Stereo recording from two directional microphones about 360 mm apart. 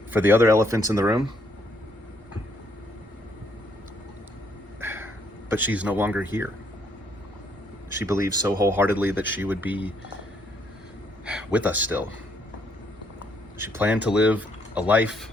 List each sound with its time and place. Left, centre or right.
0.1 s speech: centre
4.8 s a sound: centre
5.5 s speech: centre
7.9 s speech: centre
11.3 s speech: centre
13.6 s speech: centre